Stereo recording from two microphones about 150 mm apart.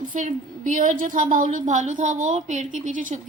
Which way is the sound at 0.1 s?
60° right (ahead or behind).